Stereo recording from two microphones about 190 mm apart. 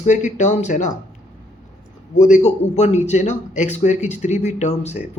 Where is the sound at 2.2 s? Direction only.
40° left (ahead or behind).